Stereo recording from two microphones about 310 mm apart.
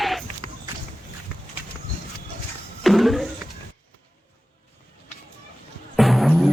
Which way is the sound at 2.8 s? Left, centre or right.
Centre.